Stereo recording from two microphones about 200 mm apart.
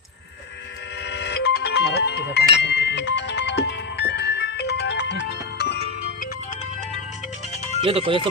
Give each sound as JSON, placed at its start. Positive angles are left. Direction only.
{"t": 1.0, "sound": "music", "side_deg": 60}
{"t": 7.8, "sound": "speech", "side_deg": -30}